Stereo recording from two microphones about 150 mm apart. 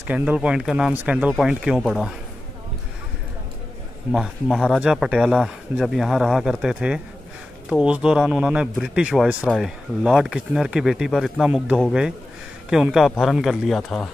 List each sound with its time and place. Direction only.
0.0 s speech: 10° right (ahead or behind)
4.1 s speech: 5° right (ahead or behind)